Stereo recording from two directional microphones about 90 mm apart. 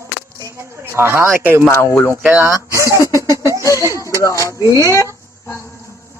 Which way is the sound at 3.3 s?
35° right (ahead or behind).